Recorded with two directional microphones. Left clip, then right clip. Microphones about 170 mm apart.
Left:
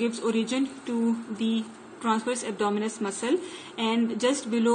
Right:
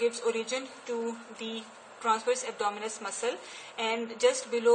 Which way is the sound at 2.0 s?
20° left (ahead or behind).